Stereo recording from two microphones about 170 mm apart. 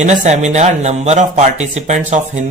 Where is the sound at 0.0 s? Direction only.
45° right (ahead or behind).